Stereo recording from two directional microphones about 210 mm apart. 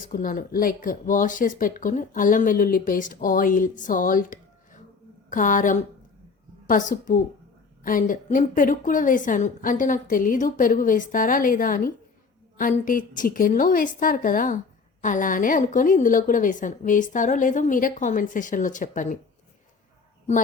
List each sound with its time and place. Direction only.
0.0 s speech: 40° left (ahead or behind)